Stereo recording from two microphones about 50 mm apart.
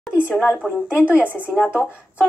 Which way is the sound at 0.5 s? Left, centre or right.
Right.